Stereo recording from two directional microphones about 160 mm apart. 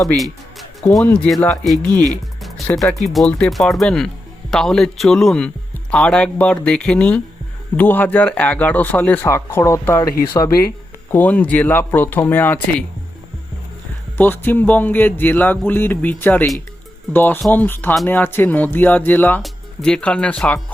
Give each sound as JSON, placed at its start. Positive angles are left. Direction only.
{"t": 0.1, "sound": "speech", "side_deg": 10}
{"t": 11.1, "sound": "speech", "side_deg": 10}
{"t": 14.2, "sound": "speech", "side_deg": 10}